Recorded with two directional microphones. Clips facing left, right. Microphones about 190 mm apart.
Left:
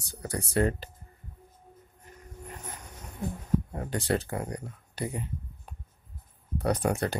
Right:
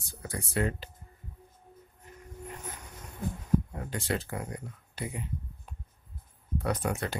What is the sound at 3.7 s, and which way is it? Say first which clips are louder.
Speech: left 4 dB; 35° left (ahead or behind).